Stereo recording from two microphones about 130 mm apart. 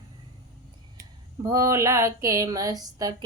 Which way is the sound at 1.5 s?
25° right (ahead or behind).